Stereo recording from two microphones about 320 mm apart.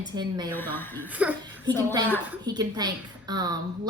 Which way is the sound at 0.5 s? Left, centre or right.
Centre.